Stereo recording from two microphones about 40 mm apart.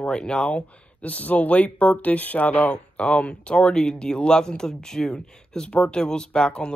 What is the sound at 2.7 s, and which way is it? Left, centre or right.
Speech, left.